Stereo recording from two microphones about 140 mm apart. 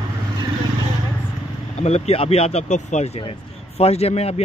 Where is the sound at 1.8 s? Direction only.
45° left (ahead or behind).